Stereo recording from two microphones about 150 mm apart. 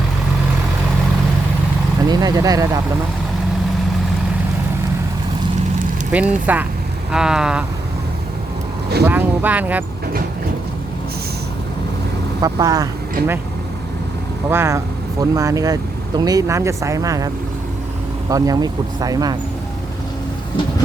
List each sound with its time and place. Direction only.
2.0 s speech: 25° right (ahead or behind)
6.1 s speech: 10° right (ahead or behind)
7.1 s vehicle: 5° right (ahead or behind)
9.0 s speech: 15° right (ahead or behind)
12.4 s speech: 25° right (ahead or behind)
14.5 s speech: 15° right (ahead or behind)